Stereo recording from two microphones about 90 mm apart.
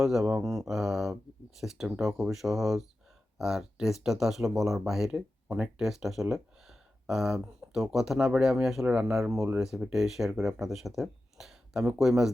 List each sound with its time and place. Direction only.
0.0 s speech: 5° right (ahead or behind)